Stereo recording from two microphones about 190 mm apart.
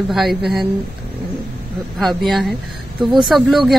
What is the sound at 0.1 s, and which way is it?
Speech, centre (ahead or behind).